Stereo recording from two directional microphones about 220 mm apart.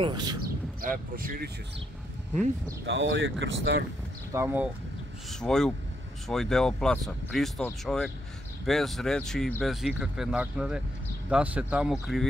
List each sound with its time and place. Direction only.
0.0 s speech: 20° right (ahead or behind)
0.7 s speech: 40° right (ahead or behind)
2.9 s speech: 55° right (ahead or behind)
4.3 s speech: 10° right (ahead or behind)
5.4 s speech: 5° left (ahead or behind)